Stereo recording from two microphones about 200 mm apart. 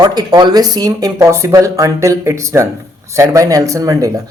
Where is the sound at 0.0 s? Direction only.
20° right (ahead or behind).